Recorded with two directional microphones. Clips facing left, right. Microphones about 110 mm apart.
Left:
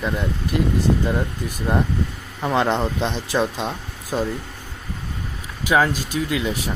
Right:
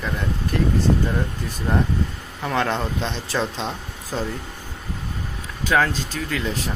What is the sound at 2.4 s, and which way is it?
Speech, 20° left (ahead or behind).